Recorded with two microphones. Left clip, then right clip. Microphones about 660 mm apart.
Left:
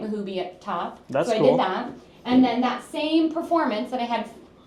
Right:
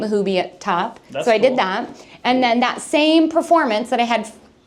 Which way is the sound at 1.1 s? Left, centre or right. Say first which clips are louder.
Left 3 dB; left.